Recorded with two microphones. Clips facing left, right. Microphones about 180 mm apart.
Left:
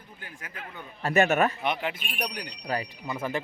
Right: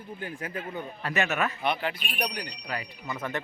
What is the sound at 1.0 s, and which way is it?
Speech, 45° left (ahead or behind).